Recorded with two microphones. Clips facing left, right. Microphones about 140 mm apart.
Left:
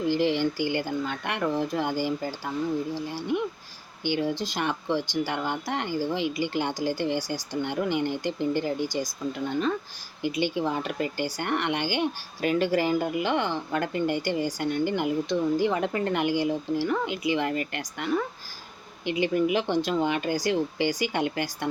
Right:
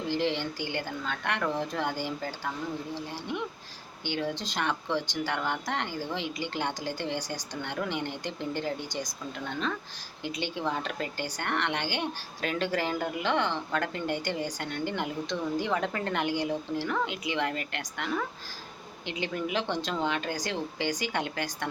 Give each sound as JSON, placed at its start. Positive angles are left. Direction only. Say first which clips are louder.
{"t": 0.1, "sound": "speech", "louder": "left 4 dB", "side_deg": 10}
{"t": 4.0, "sound": "speech", "louder": "left 5 dB", "side_deg": 5}
{"t": 10.2, "sound": "speech", "louder": "left 6 dB", "side_deg": 10}